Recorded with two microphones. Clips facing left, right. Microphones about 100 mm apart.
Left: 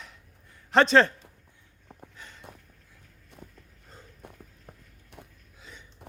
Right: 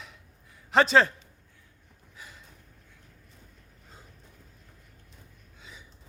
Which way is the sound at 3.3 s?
65° left (ahead or behind).